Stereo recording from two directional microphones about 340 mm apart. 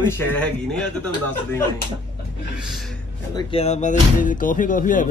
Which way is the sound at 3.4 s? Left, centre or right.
Centre.